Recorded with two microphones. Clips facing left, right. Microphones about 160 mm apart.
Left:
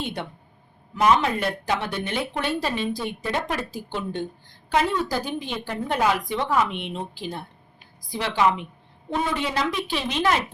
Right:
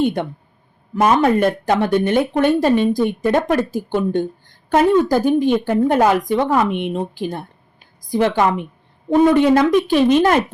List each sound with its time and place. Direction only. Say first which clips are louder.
0.0 s speech: right 12 dB; 45° right (ahead or behind)